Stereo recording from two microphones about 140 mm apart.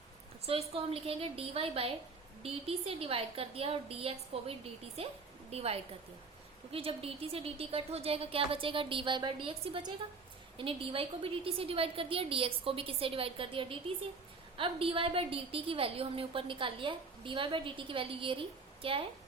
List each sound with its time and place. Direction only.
0.4 s a woman's voice: 45° right (ahead or behind)